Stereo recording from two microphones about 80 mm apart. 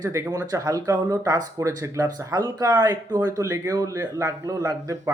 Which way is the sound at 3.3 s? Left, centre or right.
Right.